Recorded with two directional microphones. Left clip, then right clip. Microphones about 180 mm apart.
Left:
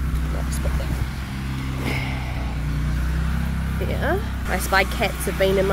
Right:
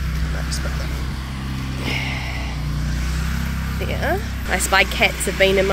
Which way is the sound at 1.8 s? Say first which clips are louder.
Right 3 dB; 15° left (ahead or behind).